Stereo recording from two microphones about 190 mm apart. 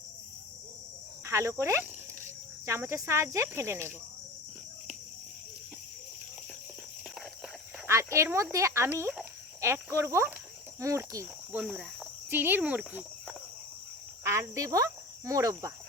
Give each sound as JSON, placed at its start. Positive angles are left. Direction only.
{"t": 1.2, "sound": "speech", "side_deg": -15}
{"t": 7.9, "sound": "speech", "side_deg": -15}
{"t": 11.6, "sound": "insect", "side_deg": -5}
{"t": 14.3, "sound": "cricket", "side_deg": -15}